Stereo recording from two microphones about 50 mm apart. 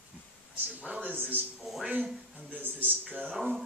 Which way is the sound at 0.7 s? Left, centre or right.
Right.